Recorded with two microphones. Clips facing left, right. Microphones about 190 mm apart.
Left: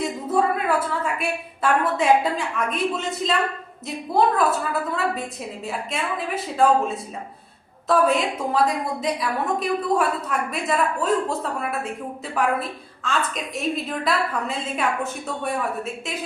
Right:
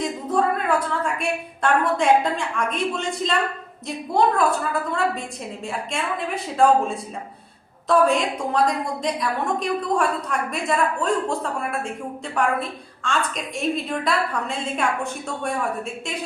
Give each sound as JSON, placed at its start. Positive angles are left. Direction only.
{"t": 0.0, "sound": "a woman's voice", "side_deg": 5}